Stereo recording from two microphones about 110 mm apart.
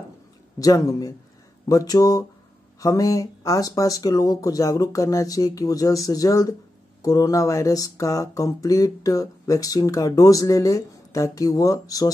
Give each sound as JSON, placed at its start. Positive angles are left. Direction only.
{"t": 0.6, "sound": "speech", "side_deg": 35}